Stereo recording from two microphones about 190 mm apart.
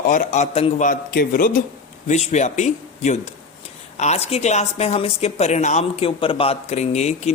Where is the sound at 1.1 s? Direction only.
50° left (ahead or behind).